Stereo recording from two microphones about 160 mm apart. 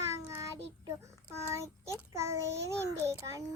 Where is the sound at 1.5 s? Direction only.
20° right (ahead or behind).